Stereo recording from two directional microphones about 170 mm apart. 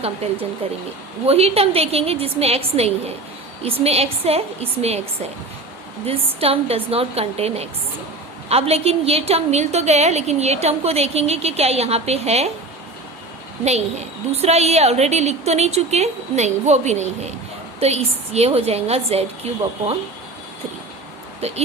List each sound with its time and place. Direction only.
0.2 s a woman's voice: 40° right (ahead or behind)
6.4 s a woman's voice: 35° right (ahead or behind)
13.7 s a woman's voice: 40° right (ahead or behind)